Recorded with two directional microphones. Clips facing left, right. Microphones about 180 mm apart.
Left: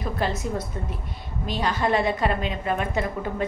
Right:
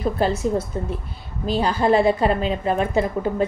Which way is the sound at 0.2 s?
30° right (ahead or behind).